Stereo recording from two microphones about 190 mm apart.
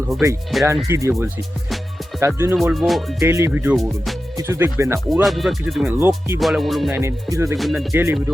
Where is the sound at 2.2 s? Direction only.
10° right (ahead or behind).